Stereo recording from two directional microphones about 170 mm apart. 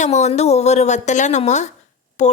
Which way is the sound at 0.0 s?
40° left (ahead or behind).